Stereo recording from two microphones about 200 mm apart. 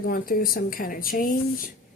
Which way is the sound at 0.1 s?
45° left (ahead or behind).